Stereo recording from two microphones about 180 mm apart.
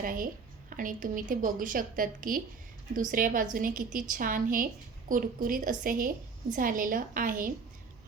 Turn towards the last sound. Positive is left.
turn(degrees=-50)  # may be behind; listen again after turning